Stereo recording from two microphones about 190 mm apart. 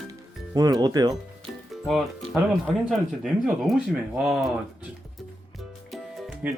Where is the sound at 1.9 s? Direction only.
Centre (ahead or behind).